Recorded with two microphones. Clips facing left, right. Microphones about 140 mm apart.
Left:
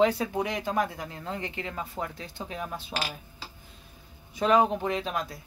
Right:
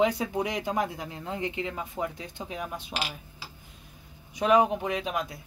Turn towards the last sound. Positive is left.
turn(degrees=-15)  # may be behind; listen again after turning